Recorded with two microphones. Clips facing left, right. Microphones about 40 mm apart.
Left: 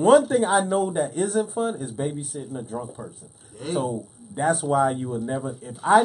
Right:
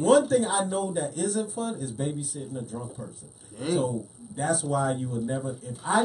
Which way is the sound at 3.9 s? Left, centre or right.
Left.